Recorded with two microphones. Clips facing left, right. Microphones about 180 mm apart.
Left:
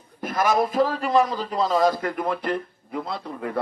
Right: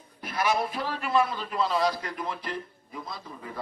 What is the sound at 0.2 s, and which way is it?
A man's voice, 45° left (ahead or behind).